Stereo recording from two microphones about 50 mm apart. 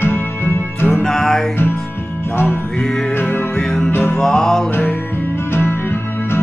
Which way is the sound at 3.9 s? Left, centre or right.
Left.